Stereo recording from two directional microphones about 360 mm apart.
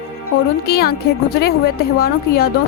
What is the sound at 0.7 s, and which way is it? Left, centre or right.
A woman's voice, left.